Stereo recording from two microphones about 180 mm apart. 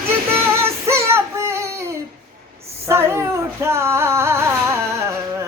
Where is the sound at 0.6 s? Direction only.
15° right (ahead or behind).